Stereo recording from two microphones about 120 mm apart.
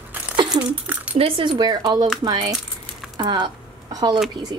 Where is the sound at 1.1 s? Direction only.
50° right (ahead or behind).